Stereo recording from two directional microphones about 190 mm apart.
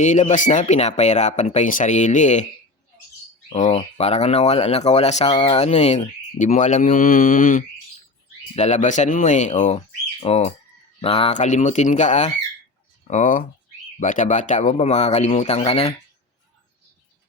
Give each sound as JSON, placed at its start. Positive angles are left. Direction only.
{"t": 0.0, "sound": "speech", "side_deg": 40}
{"t": 3.5, "sound": "speech", "side_deg": 35}